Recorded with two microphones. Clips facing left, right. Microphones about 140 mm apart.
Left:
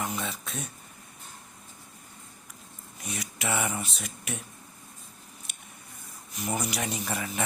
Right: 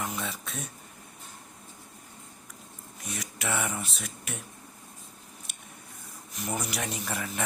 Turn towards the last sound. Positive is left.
turn(degrees=0)  # may be behind; listen again after turning